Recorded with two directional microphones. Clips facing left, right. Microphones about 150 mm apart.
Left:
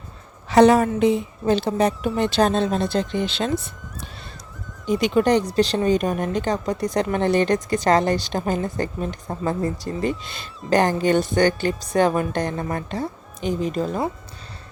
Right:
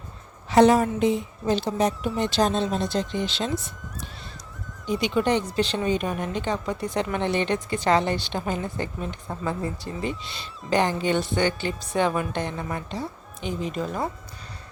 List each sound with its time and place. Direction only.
0.5 s speech: 70° left (ahead or behind)
4.9 s speech: 45° left (ahead or behind)